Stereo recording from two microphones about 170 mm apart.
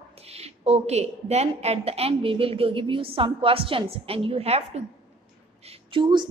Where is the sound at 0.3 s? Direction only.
40° right (ahead or behind).